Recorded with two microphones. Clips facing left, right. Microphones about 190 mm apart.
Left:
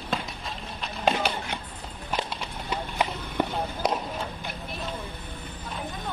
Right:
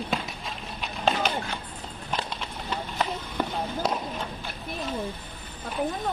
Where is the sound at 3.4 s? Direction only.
20° left (ahead or behind).